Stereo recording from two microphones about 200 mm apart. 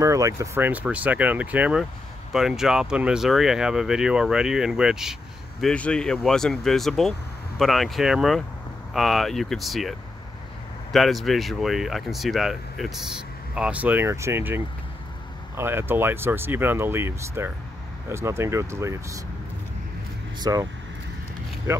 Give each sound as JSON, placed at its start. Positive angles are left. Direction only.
{"t": 0.0, "sound": "speech", "side_deg": -15}
{"t": 20.3, "sound": "speech", "side_deg": -20}
{"t": 21.7, "sound": "speech", "side_deg": -10}